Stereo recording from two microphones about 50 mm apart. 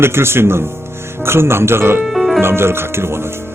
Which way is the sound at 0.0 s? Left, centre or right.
Right.